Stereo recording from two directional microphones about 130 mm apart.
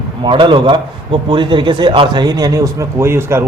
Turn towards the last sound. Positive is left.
turn(degrees=-20)  # may be behind; listen again after turning